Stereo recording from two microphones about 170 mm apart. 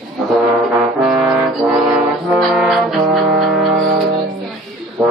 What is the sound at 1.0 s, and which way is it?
Brass instrument, centre (ahead or behind).